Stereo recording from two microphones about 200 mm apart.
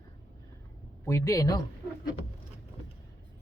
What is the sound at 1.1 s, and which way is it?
Speech, 15° left (ahead or behind).